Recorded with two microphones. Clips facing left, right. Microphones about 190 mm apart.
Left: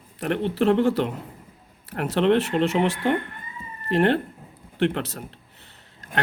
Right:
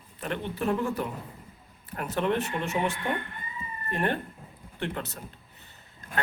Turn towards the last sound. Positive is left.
turn(degrees=75)  # may be behind; listen again after turning